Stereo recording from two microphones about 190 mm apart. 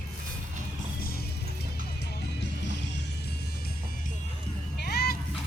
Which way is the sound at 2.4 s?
65° left (ahead or behind).